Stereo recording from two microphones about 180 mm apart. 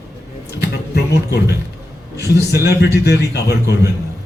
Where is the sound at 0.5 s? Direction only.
65° left (ahead or behind).